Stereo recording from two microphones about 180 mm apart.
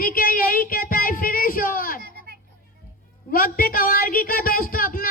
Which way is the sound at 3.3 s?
55° left (ahead or behind).